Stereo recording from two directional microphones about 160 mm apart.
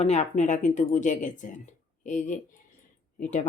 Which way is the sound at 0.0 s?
40° left (ahead or behind).